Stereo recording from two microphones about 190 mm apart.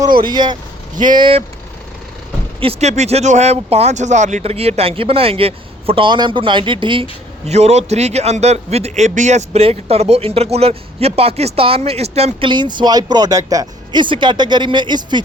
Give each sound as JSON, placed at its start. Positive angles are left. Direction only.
{"t": 0.3, "sound": "speech", "side_deg": -20}
{"t": 2.6, "sound": "speech", "side_deg": -35}